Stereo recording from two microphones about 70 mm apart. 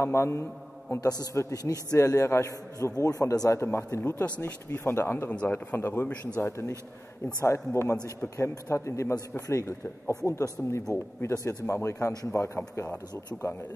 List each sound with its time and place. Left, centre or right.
0.0 s a man's voice: left
1.6 s a man's voice: left
2.0 s speech: left
4.2 s speech: left
4.6 s a man's voice: left
5.3 s a man's voice: centre
5.7 s speech: left
7.4 s a man's voice: left
10.4 s a man's voice: left